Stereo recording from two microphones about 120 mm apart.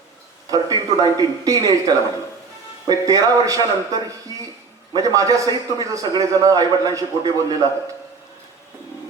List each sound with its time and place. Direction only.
0.5 s a man's voice: 30° right (ahead or behind)